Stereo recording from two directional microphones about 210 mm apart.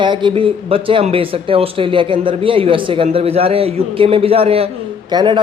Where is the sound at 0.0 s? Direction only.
20° right (ahead or behind).